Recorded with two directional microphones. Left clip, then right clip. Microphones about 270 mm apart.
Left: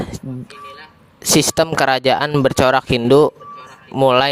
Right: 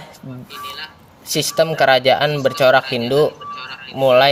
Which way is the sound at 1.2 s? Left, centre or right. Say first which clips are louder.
Left 2 dB; left.